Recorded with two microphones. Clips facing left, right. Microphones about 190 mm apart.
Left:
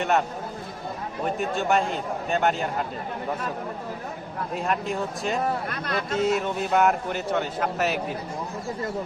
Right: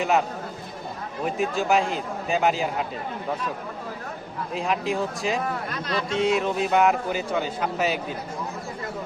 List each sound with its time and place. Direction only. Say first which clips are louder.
1.2 s a man's voice: right 1 dB; centre (ahead or behind)
4.5 s a man's voice: right 2 dB; centre (ahead or behind)
5.7 s speech: right 1 dB; 55° left (ahead or behind)
6.1 s a man's voice: right 2 dB; 5° left (ahead or behind)